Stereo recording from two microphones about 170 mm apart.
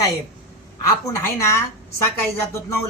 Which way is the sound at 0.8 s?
20° left (ahead or behind).